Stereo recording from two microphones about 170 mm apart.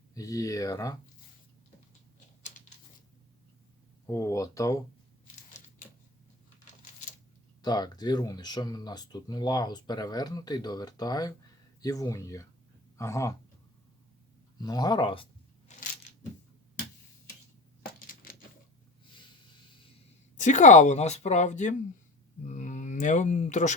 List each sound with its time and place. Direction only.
0.1 s speech: 20° left (ahead or behind)
4.0 s speech: 15° left (ahead or behind)
7.6 s speech: 25° left (ahead or behind)
14.6 s speech: 25° left (ahead or behind)
15.7 s a sound: 45° left (ahead or behind)
18.0 s a sound: 55° left (ahead or behind)
20.4 s a woman's voice: 45° left (ahead or behind)